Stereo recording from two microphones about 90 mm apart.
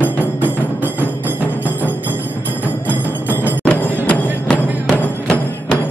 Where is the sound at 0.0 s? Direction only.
20° left (ahead or behind).